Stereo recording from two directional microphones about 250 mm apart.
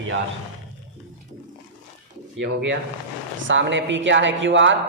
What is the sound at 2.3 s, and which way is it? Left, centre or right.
A man's voice, right.